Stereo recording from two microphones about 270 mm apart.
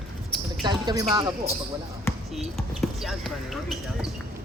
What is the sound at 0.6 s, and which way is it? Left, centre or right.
Speech, centre.